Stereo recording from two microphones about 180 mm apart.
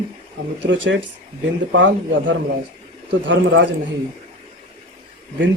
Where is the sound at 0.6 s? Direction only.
90° right.